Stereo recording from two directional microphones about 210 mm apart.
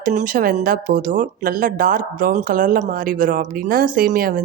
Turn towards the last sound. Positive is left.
turn(degrees=-45)  # may be behind; listen again after turning